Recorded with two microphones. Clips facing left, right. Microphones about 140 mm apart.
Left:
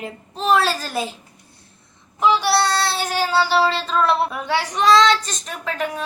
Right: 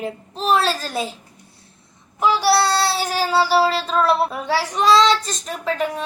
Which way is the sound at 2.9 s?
5° right (ahead or behind).